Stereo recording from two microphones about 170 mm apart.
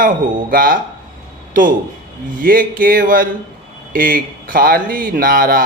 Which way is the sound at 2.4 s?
55° right (ahead or behind).